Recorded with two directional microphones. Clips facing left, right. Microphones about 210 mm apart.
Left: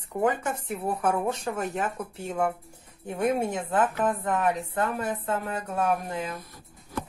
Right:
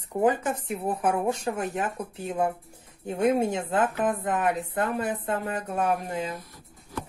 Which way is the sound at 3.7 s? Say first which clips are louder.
Left 3 dB; 20° right (ahead or behind).